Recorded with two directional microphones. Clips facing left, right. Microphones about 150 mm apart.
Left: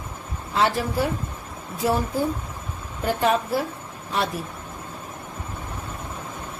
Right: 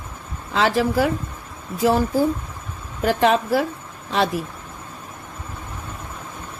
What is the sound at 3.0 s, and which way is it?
Speech, 90° right.